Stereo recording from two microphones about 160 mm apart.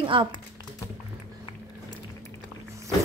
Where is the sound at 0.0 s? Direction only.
35° right (ahead or behind).